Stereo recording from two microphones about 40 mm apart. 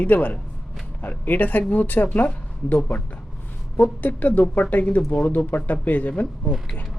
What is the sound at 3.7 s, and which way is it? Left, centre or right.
A man's voice, left.